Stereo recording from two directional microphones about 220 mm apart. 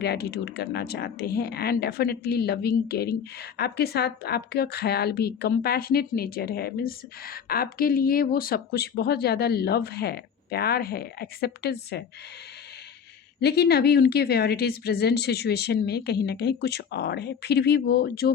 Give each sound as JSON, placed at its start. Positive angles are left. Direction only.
{"t": 0.0, "sound": "speech", "side_deg": 45}
{"t": 13.4, "sound": "speech", "side_deg": 45}